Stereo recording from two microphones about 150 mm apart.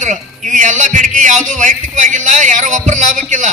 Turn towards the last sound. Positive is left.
turn(degrees=-55)  # may be behind; listen again after turning